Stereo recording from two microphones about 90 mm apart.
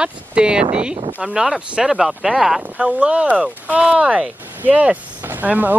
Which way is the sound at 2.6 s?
15° right (ahead or behind).